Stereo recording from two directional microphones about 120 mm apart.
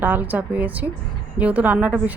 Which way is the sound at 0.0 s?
15° right (ahead or behind).